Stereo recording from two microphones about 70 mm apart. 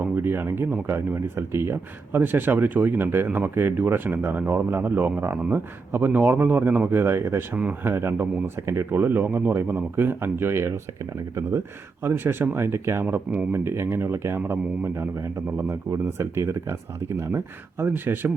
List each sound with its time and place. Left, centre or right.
0.0 s speech: right
12.0 s speech: right